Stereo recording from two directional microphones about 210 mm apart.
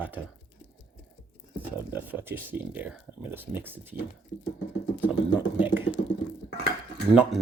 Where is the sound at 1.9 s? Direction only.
10° right (ahead or behind).